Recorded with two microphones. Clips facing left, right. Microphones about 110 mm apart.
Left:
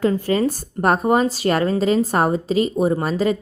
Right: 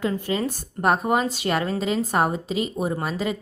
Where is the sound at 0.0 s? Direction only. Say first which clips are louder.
Left 6 dB; 40° left (ahead or behind).